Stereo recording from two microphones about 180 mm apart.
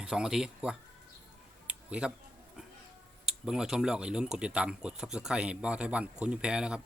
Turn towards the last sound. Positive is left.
turn(degrees=-5)  # may be behind; listen again after turning